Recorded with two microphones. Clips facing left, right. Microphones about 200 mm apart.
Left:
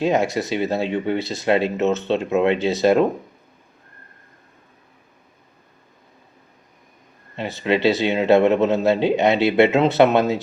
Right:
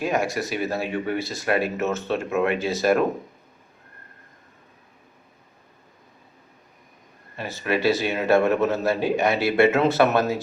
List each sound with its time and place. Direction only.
0.0 s speech: 20° left (ahead or behind)
7.3 s speech: 20° left (ahead or behind)